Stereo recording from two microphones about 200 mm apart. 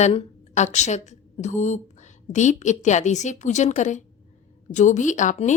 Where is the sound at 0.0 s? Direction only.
30° left (ahead or behind).